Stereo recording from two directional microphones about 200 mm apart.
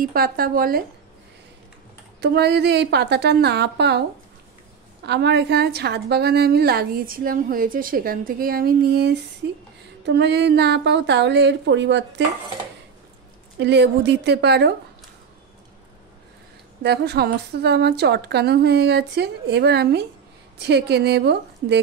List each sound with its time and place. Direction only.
0.0 s a woman's voice: 45° right (ahead or behind)
2.1 s a woman's voice: 55° right (ahead or behind)
5.0 s a woman's voice: 60° right (ahead or behind)
13.6 s a woman's voice: 60° right (ahead or behind)
16.8 s a woman's voice: 55° right (ahead or behind)